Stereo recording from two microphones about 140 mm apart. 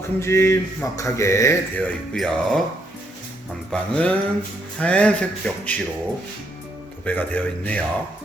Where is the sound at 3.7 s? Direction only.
5° left (ahead or behind).